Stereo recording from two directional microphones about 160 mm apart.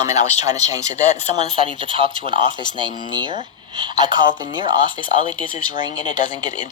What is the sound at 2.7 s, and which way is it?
Speech, 30° right (ahead or behind).